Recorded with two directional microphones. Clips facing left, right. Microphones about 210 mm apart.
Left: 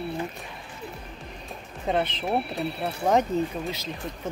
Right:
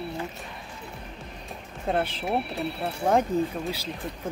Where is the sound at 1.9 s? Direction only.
5° right (ahead or behind).